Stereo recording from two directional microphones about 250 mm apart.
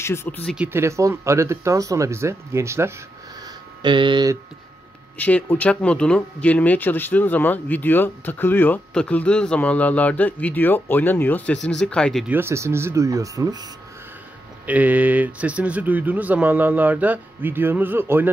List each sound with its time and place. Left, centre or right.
0.0 s speech: centre
0.6 s speech: centre
5.1 s speech: centre
14.7 s speech: centre